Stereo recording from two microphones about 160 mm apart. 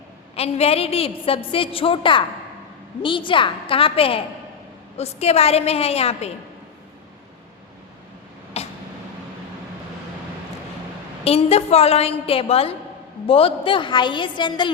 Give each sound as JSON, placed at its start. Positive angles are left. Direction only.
{"t": 0.3, "sound": "a woman's voice", "side_deg": 40}
{"t": 8.6, "sound": "a sound", "side_deg": 40}
{"t": 11.2, "sound": "a woman's voice", "side_deg": 40}